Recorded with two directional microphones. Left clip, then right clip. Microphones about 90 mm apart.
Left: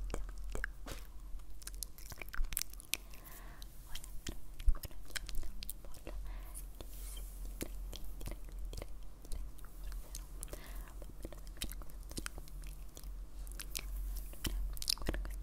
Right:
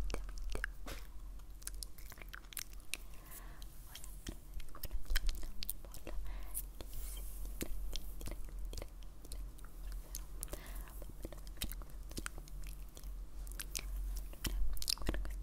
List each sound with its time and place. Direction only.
0.1 s biting: 5° right (ahead or behind)
1.6 s biting: 5° left (ahead or behind)
2.0 s biting: 25° left (ahead or behind)
2.9 s a sound: 15° left (ahead or behind)
3.3 s chewing: 5° left (ahead or behind)
10.1 s biting: centre (ahead or behind)